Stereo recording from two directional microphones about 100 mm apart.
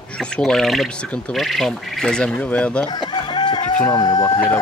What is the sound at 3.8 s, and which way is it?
Speech, 40° left (ahead or behind).